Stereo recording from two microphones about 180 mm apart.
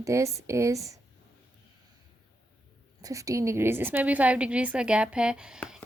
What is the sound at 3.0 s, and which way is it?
A woman's voice, 20° right (ahead or behind).